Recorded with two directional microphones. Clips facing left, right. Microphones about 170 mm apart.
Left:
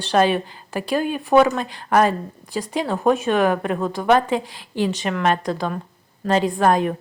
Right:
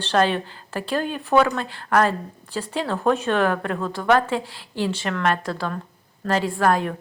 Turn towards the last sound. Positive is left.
turn(degrees=20)  # may be behind; listen again after turning